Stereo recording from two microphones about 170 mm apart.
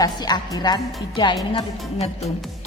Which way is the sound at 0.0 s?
25° left (ahead or behind).